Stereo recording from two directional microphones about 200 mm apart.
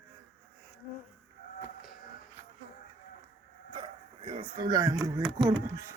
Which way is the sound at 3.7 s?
25° right (ahead or behind).